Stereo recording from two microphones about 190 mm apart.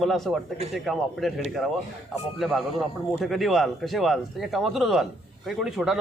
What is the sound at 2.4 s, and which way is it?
A man's voice, centre (ahead or behind).